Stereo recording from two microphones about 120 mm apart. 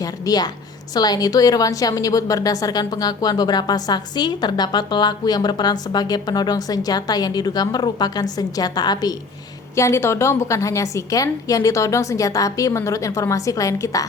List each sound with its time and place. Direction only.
0.0 s a sound: 30° left (ahead or behind)
0.9 s a woman's voice: 35° left (ahead or behind)
9.7 s a woman's voice: 25° left (ahead or behind)